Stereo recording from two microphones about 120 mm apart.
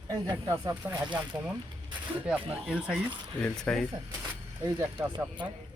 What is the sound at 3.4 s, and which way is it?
Speech, 5° left (ahead or behind).